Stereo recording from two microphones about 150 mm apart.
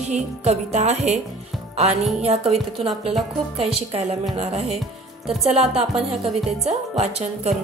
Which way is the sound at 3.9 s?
45° right (ahead or behind).